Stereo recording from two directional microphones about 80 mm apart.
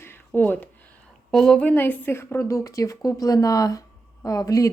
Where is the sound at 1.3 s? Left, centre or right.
Centre.